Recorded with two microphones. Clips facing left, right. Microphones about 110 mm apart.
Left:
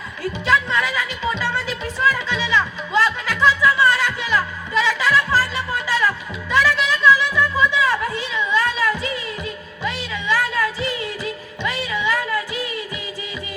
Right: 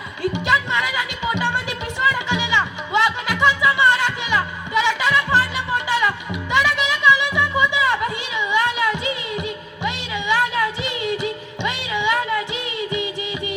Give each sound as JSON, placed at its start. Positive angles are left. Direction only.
{"t": 0.2, "sound": "music", "side_deg": -20}